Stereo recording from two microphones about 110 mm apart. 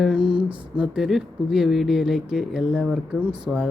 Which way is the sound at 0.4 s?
10° right (ahead or behind).